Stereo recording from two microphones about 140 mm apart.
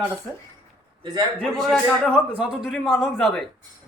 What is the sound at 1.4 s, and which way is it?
A man's voice, centre (ahead or behind).